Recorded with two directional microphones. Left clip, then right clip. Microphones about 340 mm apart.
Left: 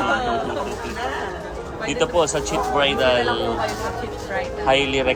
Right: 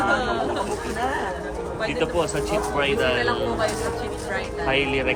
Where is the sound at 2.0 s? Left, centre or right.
Centre.